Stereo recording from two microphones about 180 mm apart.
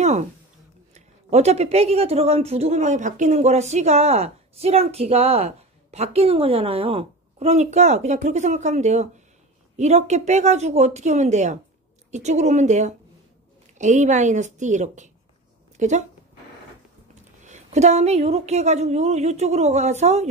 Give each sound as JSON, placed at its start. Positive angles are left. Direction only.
{"t": 0.0, "sound": "speech", "side_deg": -40}
{"t": 17.4, "sound": "speech", "side_deg": -40}